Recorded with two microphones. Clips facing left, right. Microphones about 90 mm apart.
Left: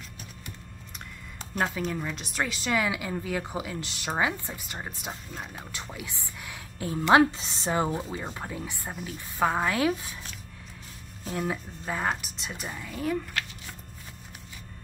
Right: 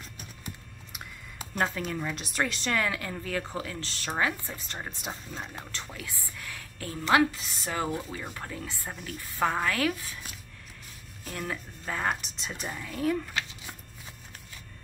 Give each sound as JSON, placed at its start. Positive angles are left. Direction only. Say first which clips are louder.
{"t": 0.9, "sound": "speech", "louder": "right 1 dB", "side_deg": -5}
{"t": 11.3, "sound": "a woman's voice", "louder": "left 5 dB", "side_deg": 15}